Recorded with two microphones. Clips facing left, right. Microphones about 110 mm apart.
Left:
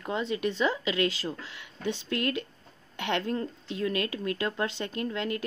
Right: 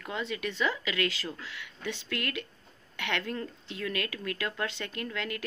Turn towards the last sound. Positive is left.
turn(degrees=25)  # may be behind; listen again after turning